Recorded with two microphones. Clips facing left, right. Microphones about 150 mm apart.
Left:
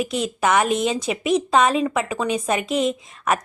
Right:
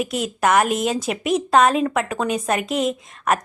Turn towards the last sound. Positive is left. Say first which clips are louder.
# right 1 dB
turn(degrees=0)  # may be behind; listen again after turning